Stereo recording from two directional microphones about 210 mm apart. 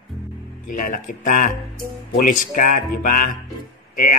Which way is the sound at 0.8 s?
40° left (ahead or behind).